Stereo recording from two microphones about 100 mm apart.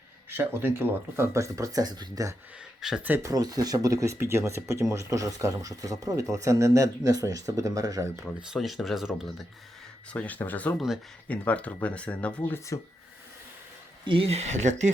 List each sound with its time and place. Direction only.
0.3 s speech: 20° right (ahead or behind); by 2.2 s 45° right (ahead or behind)
2.8 s speech: 5° right (ahead or behind)
3.2 s speech: 40° right (ahead or behind)
8.5 s speech: centre (ahead or behind)
10.1 s speech: 15° left (ahead or behind)
10.8 s speech: 5° right (ahead or behind)
11.3 s speech: 15° left (ahead or behind)
12.5 s speech: 30° left (ahead or behind)
14.0 s speech: 60° right (ahead or behind); by 14.4 s 80° right